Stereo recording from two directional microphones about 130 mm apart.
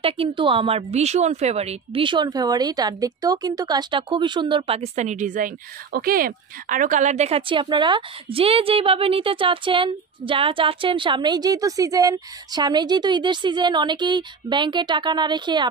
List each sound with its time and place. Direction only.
0.0 s a woman's voice: 40° right (ahead or behind)
2.0 s a woman's voice: 35° right (ahead or behind); by 5.5 s 80° right
6.1 s a woman's voice: 90° right; by 15.7 s 35° right (ahead or behind)